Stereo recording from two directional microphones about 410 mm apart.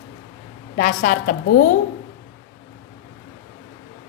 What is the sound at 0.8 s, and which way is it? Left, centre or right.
Speech, left.